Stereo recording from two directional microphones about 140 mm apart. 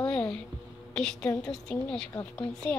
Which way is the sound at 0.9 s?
5° left (ahead or behind).